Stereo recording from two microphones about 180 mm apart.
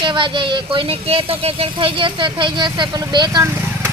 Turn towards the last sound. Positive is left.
turn(degrees=-20)  # may be behind; listen again after turning